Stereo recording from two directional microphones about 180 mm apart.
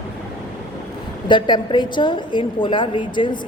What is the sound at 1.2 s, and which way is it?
A woman's voice, 25° left (ahead or behind).